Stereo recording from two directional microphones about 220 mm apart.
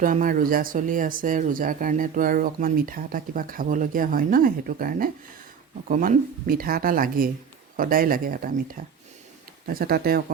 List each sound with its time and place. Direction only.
0.0 s speech: 40° right (ahead or behind)
9.6 s speech: 40° right (ahead or behind)